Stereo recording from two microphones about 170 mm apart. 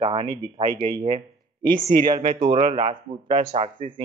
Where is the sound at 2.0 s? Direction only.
30° right (ahead or behind).